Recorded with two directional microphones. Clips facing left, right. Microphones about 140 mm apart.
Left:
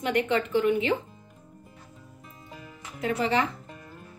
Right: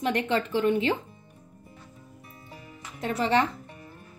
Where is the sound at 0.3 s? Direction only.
35° right (ahead or behind).